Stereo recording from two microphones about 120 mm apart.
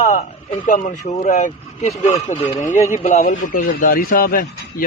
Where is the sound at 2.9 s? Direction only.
65° left (ahead or behind).